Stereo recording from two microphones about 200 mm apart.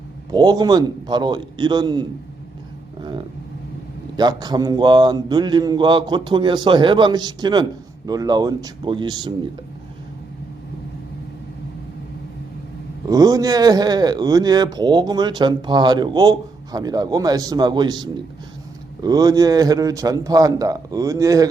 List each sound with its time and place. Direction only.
0.3 s a man's voice: 20° right (ahead or behind)
4.2 s a man's voice: 20° right (ahead or behind)
13.1 s a man's voice: 15° right (ahead or behind)